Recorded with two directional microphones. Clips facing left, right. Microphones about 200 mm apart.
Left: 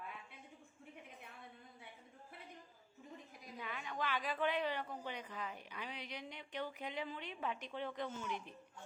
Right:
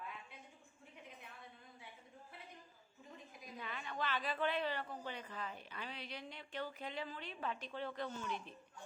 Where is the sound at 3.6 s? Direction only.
10° left (ahead or behind).